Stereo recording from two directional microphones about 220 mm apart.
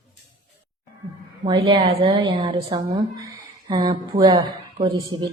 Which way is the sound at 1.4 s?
20° right (ahead or behind).